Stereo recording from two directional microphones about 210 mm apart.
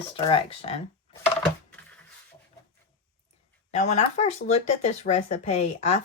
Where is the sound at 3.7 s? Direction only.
30° left (ahead or behind).